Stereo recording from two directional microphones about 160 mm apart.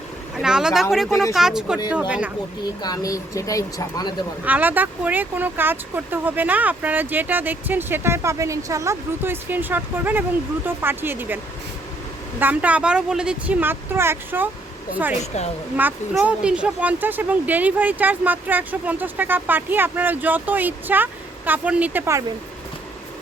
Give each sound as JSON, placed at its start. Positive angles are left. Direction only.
{"t": 0.4, "sound": "speech", "side_deg": -5}
{"t": 2.8, "sound": "speech", "side_deg": 20}
{"t": 4.4, "sound": "speech", "side_deg": -10}
{"t": 12.4, "sound": "speech", "side_deg": -10}
{"t": 15.8, "sound": "speech", "side_deg": -10}